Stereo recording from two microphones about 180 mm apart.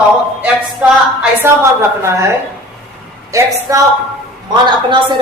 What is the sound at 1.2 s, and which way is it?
A woman's voice, 15° right (ahead or behind).